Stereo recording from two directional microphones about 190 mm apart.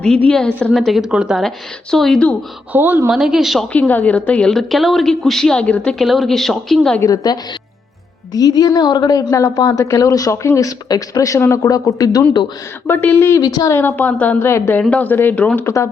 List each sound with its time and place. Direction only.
0.0 s a woman's voice: 5° left (ahead or behind)
2.7 s a woman's voice: 10° right (ahead or behind)
7.0 s a woman's voice: 20° left (ahead or behind)